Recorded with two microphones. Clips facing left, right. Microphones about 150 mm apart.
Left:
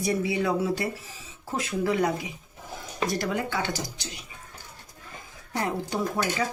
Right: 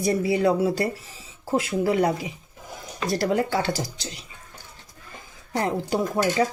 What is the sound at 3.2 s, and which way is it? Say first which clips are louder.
Speech: right 5 dB; 35° right (ahead or behind).